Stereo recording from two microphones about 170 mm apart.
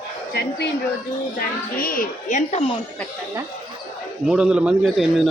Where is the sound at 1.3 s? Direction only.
55° left (ahead or behind); by 2.7 s 40° left (ahead or behind).